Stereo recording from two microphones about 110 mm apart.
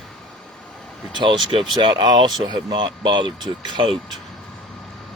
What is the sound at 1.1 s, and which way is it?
Speech, 45° right (ahead or behind).